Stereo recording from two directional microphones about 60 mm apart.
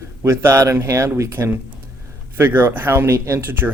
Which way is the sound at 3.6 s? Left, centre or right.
Right.